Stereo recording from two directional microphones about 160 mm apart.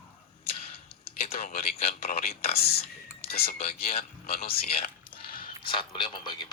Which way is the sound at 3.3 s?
70° left (ahead or behind).